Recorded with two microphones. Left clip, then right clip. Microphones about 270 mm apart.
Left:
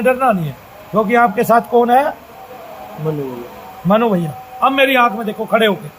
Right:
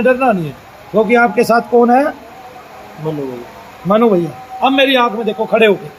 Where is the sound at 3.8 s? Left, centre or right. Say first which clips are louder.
Right 3 dB; left.